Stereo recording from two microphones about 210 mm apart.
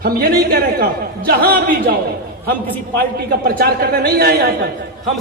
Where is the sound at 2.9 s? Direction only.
45° right (ahead or behind).